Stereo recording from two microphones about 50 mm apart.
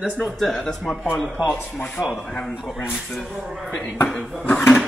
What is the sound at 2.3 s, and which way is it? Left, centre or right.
Speech, centre.